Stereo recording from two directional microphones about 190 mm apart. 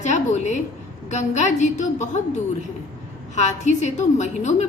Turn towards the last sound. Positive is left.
turn(degrees=35)  # may be behind; listen again after turning